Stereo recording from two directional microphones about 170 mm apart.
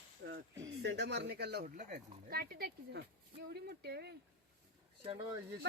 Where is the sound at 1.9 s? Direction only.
65° right (ahead or behind).